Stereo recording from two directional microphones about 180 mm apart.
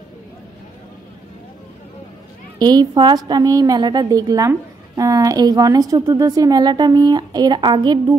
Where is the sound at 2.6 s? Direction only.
20° right (ahead or behind).